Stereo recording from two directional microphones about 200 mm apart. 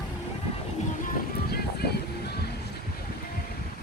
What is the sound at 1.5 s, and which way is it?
Vehicle, 55° left (ahead or behind).